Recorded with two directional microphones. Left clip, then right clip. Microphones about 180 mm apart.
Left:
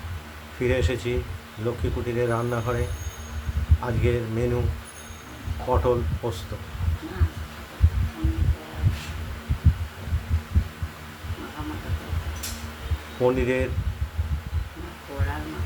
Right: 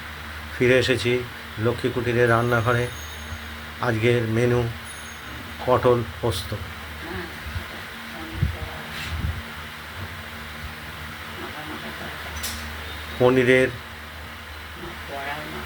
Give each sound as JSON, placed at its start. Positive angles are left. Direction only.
{"t": 0.6, "sound": "speech", "side_deg": -15}
{"t": 3.8, "sound": "speech", "side_deg": -15}
{"t": 5.7, "sound": "speech", "side_deg": -15}
{"t": 13.2, "sound": "speech", "side_deg": -15}